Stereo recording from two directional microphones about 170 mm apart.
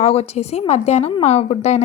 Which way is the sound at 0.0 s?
35° left (ahead or behind).